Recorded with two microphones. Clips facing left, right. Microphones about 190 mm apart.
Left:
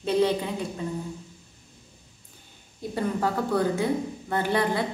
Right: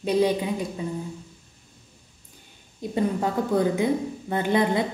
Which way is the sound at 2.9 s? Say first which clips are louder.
Right 2 dB; 20° right (ahead or behind).